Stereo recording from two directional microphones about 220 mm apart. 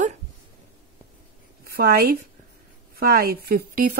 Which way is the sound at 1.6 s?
45° right (ahead or behind).